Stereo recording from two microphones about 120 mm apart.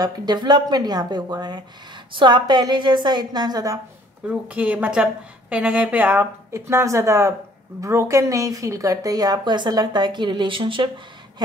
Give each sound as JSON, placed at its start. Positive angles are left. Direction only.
{"t": 0.0, "sound": "speech", "side_deg": -35}
{"t": 4.3, "sound": "a woman's voice", "side_deg": -15}